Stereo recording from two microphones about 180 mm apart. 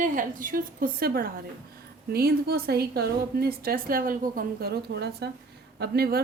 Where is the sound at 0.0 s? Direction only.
50° right (ahead or behind).